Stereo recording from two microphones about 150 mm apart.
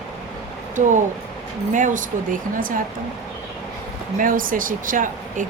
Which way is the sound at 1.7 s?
60° right (ahead or behind).